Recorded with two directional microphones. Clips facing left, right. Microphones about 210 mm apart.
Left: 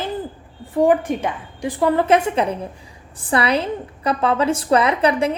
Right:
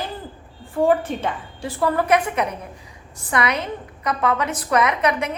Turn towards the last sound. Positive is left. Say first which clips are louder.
# left 3 dB
turn(degrees=30)  # may be behind; listen again after turning